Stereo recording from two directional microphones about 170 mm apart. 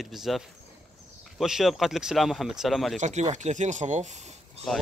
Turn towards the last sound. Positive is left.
turn(degrees=5)  # may be behind; listen again after turning